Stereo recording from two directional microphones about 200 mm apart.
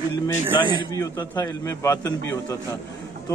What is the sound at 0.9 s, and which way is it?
A man's voice, 15° left (ahead or behind).